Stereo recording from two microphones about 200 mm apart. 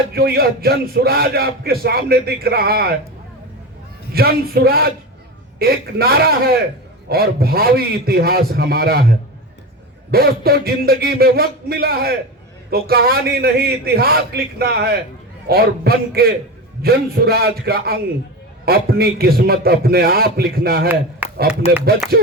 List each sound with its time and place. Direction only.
0.1 s a man's voice: 50° right (ahead or behind)
4.1 s a man's voice: 50° right (ahead or behind)
21.6 s speech: 30° left (ahead or behind)